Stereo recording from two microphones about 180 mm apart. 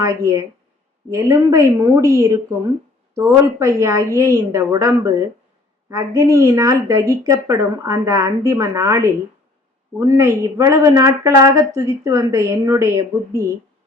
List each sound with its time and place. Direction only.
0.0 s a woman's voice: 20° right (ahead or behind)